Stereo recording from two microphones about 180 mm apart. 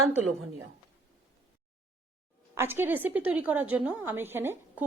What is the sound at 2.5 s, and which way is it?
A woman's voice, 15° right (ahead or behind).